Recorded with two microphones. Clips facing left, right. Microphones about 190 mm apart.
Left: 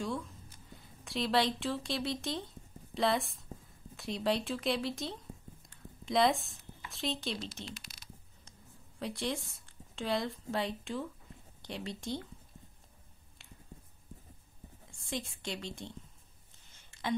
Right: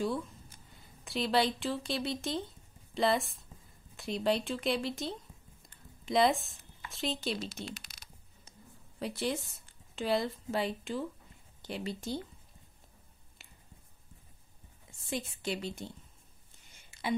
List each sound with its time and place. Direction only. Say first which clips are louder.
0.7 s speech: left 2 dB; centre (ahead or behind)
5.7 s a sound: right 2 dB; centre (ahead or behind)
7.6 s speech: right 3 dB; 50° right (ahead or behind)
9.0 s a woman's voice: right 2 dB; 5° right (ahead or behind)
13.4 s a sound: left 4 dB; 5° right (ahead or behind)
14.9 s a woman's voice: right 2 dB; 5° right (ahead or behind)